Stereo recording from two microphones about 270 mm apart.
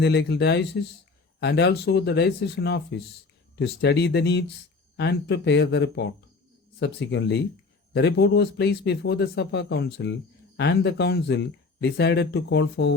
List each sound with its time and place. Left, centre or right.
0.0 s speech: left